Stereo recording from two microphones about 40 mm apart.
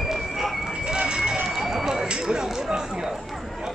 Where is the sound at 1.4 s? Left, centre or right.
Centre.